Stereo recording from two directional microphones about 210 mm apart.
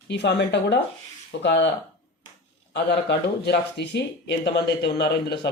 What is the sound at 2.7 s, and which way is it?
Speech, 55° left (ahead or behind).